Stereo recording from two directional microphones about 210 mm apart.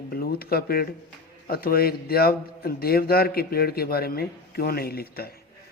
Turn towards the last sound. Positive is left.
turn(degrees=45)  # may be behind; listen again after turning